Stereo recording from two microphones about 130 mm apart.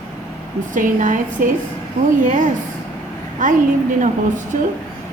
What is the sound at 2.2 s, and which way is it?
A woman's voice, 80° right.